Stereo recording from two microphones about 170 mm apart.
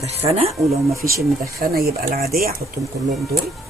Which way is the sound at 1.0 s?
60° right (ahead or behind).